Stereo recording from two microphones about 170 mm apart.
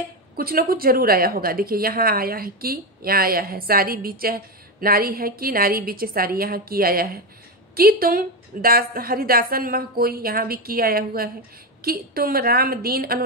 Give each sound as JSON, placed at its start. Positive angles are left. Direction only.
{"t": 0.4, "sound": "speech", "side_deg": -60}